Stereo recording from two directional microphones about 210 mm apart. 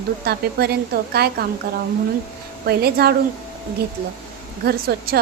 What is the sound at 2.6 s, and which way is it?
Speech, 50° right (ahead or behind).